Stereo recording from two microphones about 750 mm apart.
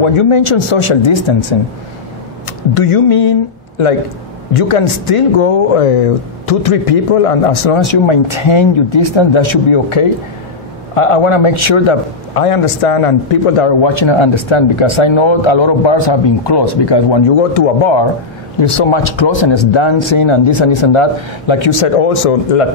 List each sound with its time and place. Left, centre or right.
0.0 s a man's voice: left
2.7 s speech: left
4.6 s a man's voice: left
18.6 s a man's voice: left